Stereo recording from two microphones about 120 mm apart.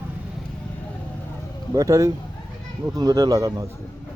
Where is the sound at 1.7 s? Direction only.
25° right (ahead or behind).